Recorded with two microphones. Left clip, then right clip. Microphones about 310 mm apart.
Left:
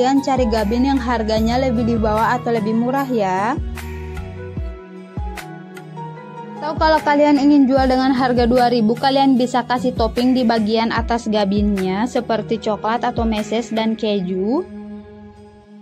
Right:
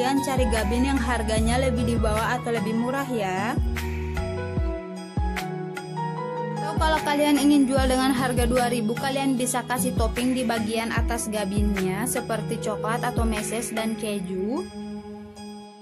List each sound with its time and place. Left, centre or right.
0.0 s speech: right
6.6 s a woman's voice: right